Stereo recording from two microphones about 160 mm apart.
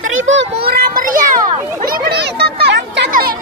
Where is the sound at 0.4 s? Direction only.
70° right (ahead or behind).